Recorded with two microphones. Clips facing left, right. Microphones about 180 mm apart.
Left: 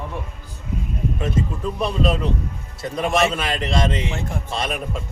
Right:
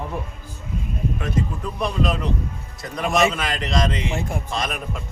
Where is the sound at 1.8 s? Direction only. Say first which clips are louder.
Left 2 dB; 30° left (ahead or behind).